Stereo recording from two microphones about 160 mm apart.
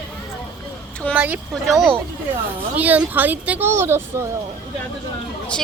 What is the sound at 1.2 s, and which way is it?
Speech, 5° right (ahead or behind).